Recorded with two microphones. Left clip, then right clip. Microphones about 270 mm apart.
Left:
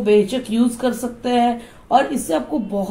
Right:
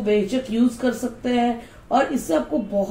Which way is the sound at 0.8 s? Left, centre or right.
Left.